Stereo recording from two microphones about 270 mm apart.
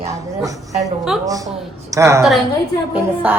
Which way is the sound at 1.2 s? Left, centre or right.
Centre.